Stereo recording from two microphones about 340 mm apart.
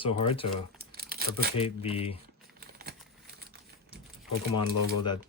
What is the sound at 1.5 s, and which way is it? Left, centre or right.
Speech, centre.